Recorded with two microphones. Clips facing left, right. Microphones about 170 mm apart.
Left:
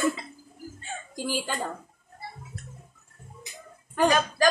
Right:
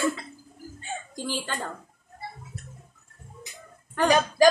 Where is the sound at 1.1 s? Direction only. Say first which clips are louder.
Left 3 dB; 10° left (ahead or behind).